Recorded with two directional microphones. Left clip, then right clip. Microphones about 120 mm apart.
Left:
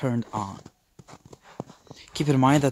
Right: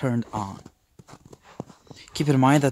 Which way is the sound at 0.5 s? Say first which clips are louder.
Even; 35° left (ahead or behind).